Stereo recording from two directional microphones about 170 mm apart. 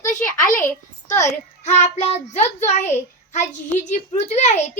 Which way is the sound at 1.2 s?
40° left (ahead or behind).